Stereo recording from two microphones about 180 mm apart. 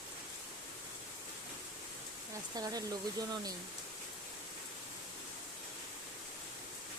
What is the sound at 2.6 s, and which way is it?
Speech, 20° right (ahead or behind).